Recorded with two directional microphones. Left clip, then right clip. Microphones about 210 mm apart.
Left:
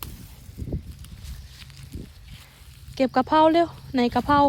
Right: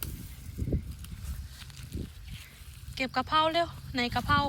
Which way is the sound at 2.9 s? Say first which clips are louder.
Left 8 dB; 30° left (ahead or behind).